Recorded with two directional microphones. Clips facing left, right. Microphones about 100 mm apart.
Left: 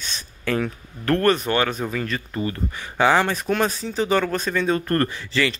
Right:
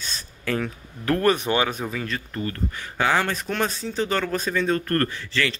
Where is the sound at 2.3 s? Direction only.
15° left (ahead or behind).